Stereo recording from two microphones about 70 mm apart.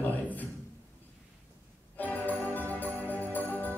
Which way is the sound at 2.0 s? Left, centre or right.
Left.